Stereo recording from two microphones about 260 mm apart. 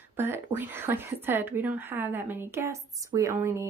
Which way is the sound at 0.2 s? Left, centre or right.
Centre.